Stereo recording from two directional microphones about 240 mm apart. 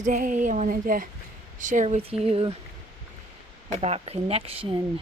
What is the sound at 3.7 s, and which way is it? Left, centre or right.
Speech, right.